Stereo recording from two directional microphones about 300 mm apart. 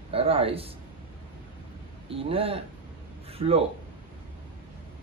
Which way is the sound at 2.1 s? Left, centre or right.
Centre.